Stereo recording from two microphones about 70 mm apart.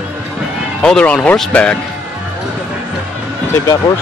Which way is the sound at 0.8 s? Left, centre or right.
Centre.